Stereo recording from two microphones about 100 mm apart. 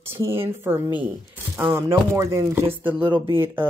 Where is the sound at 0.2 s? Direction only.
25° right (ahead or behind).